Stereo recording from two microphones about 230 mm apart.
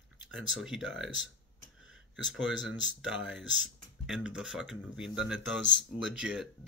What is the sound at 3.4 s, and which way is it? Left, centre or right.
Speech, left.